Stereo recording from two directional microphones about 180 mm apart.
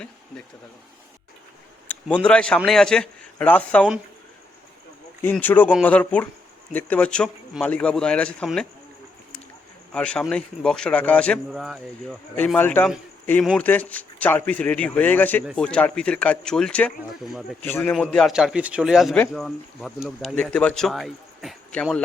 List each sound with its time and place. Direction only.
1.9 s a man's voice: 5° left (ahead or behind)
5.2 s a man's voice: 10° left (ahead or behind)
9.9 s speech: 5° left (ahead or behind)
12.5 s a man's voice: 10° left (ahead or behind)